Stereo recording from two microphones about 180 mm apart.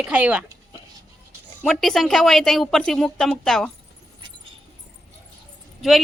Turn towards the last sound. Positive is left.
turn(degrees=0)  # may be behind; listen again after turning